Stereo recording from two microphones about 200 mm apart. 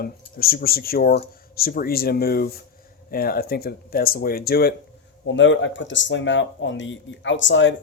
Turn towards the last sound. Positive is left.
turn(degrees=65)  # may be behind; listen again after turning